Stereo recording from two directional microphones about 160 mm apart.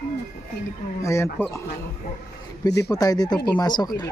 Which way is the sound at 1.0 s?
15° left (ahead or behind).